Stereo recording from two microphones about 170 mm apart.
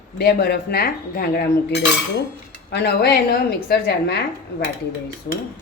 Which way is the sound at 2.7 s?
75° left (ahead or behind).